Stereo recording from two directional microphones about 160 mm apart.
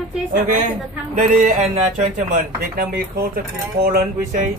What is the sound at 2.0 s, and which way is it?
Speech, 55° right (ahead or behind).